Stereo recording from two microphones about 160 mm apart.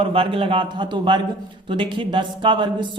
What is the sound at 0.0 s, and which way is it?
Speech, 35° right (ahead or behind).